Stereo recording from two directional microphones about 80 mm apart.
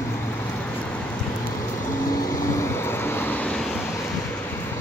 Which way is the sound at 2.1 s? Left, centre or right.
Left.